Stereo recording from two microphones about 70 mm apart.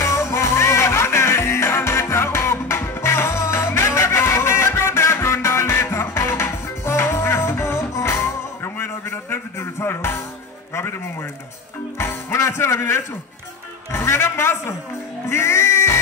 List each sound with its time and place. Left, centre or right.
0.0 s music: left
12.0 s music: left
13.9 s a sound: left
15.2 s music: left